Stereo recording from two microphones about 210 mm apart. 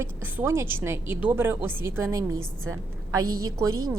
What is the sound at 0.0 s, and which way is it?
A woman's voice, 10° right (ahead or behind).